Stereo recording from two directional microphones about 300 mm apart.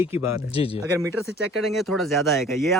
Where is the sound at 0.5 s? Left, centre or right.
Centre.